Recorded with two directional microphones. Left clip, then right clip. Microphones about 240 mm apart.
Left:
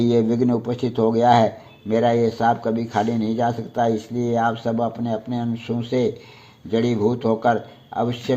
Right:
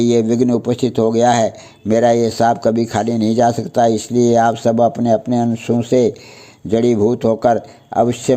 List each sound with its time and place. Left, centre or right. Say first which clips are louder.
0.0 s speech: right 5 dB; right
1.9 s speech: right 5 dB; right